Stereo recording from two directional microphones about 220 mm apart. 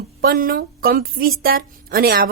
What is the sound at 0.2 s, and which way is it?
A woman's voice, 40° right (ahead or behind).